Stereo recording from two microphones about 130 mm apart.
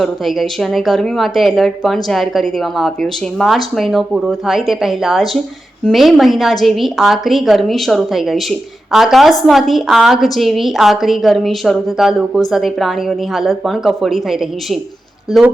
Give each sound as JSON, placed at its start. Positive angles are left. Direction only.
{"t": 0.0, "sound": "speech", "side_deg": 0}